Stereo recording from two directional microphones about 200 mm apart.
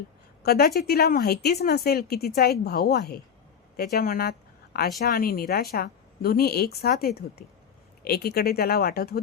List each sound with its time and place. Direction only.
0.4 s speech: 50° left (ahead or behind)